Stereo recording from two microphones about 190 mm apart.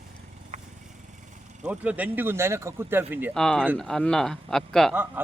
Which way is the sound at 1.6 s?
5° right (ahead or behind).